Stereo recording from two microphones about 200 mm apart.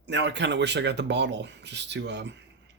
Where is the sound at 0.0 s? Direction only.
60° right (ahead or behind).